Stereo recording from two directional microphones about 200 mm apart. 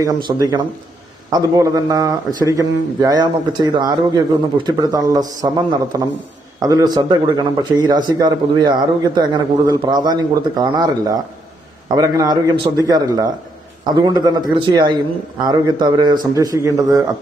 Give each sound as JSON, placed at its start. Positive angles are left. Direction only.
{"t": 0.0, "sound": "a man's voice", "side_deg": -20}